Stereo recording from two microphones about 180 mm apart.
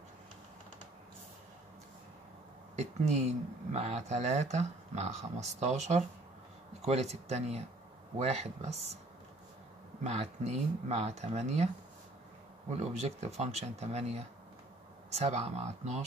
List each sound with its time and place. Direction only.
2.8 s speech: 40° right (ahead or behind)
10.0 s speech: 35° right (ahead or behind)